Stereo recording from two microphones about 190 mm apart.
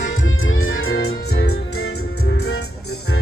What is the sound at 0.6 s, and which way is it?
Music, 90° left.